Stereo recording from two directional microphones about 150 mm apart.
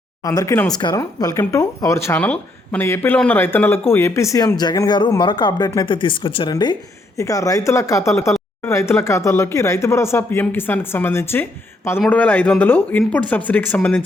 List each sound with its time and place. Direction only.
0.2 s speech: 25° left (ahead or behind)